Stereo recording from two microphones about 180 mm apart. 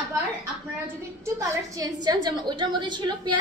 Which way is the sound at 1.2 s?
20° right (ahead or behind).